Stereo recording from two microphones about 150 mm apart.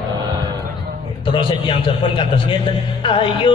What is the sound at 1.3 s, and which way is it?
A man's voice, 35° left (ahead or behind).